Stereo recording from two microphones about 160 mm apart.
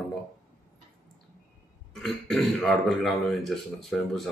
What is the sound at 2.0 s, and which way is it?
Speech, 5° left (ahead or behind).